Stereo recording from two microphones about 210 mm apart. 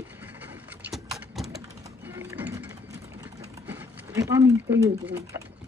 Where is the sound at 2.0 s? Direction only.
10° right (ahead or behind).